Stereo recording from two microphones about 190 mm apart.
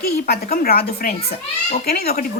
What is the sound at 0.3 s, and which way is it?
Speech, 50° left (ahead or behind).